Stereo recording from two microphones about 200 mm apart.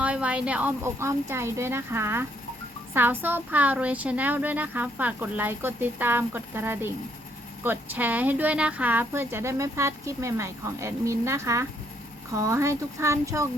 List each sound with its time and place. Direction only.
0.0 s speech: 5° right (ahead or behind)